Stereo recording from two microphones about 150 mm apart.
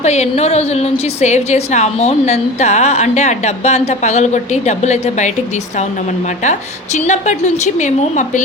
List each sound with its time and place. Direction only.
0.0 s a woman's voice: 50° left (ahead or behind)
6.4 s a woman's voice: 50° left (ahead or behind)